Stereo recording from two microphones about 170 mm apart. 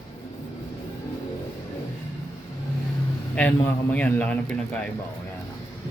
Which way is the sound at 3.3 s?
10° left (ahead or behind).